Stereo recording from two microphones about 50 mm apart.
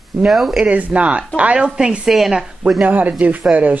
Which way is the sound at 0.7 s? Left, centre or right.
Right.